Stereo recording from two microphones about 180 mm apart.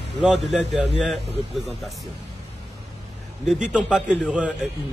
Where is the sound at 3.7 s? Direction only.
5° right (ahead or behind).